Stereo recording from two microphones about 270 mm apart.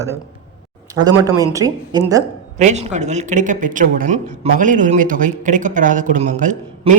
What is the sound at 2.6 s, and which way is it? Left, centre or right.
Speech, right.